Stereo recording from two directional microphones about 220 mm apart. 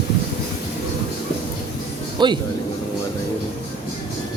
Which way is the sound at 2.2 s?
20° right (ahead or behind).